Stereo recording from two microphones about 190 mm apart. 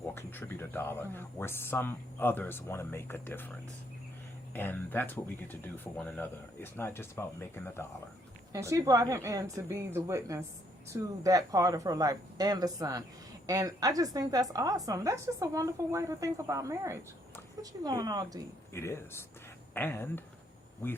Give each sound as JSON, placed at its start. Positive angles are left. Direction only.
{"t": 0.1, "sound": "speech", "side_deg": 10}
{"t": 4.5, "sound": "speech", "side_deg": 10}
{"t": 8.5, "sound": "a woman's voice", "side_deg": -15}
{"t": 18.7, "sound": "speech", "side_deg": 15}